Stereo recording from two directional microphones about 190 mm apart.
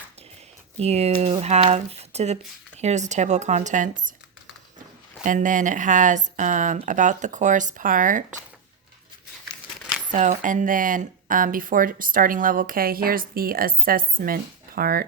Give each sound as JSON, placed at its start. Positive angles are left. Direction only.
{"t": 0.8, "sound": "speech", "side_deg": -35}
{"t": 5.2, "sound": "speech", "side_deg": -45}
{"t": 10.1, "sound": "speech", "side_deg": -40}